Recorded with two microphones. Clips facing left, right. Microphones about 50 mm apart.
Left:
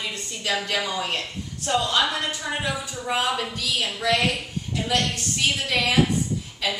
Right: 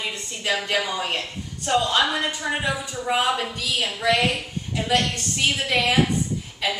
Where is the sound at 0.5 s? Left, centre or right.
Centre.